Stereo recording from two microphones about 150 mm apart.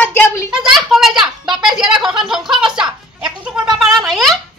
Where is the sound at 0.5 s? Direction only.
5° right (ahead or behind).